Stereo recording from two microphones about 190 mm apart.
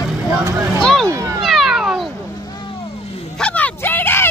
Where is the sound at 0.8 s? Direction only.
5° left (ahead or behind).